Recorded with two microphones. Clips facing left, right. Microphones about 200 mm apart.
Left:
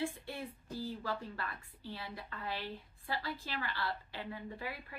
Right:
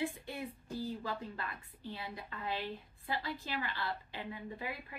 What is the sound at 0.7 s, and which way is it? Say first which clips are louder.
A woman's voice: even; 20° right (ahead or behind).